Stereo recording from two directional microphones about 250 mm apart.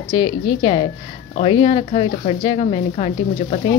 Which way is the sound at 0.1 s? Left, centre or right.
Centre.